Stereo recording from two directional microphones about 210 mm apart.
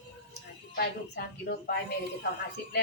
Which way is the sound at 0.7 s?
50° left (ahead or behind).